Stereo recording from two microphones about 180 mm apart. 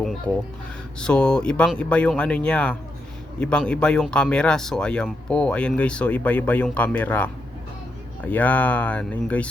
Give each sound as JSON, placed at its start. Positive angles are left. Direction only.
{"t": 0.0, "sound": "music", "side_deg": 0}
{"t": 0.9, "sound": "speech", "side_deg": 5}